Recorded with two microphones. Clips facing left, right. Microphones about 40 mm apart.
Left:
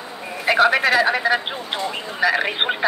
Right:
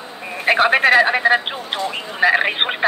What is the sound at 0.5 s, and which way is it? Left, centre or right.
Speech, right.